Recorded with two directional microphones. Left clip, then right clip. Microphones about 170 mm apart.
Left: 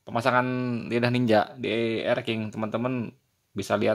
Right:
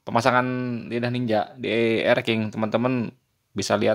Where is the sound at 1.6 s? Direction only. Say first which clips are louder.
Right 5 dB; 10° right (ahead or behind).